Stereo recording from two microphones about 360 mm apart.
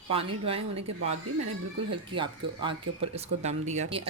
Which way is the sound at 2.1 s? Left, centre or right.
Centre.